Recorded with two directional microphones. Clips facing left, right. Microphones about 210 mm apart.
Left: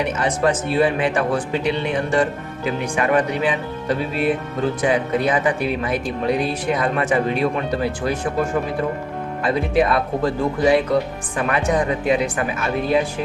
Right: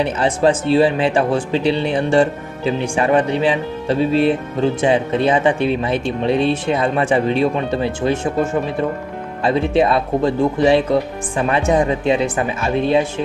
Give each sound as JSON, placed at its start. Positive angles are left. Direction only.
{"t": 0.0, "sound": "speech", "side_deg": -30}
{"t": 9.4, "sound": "speech", "side_deg": -25}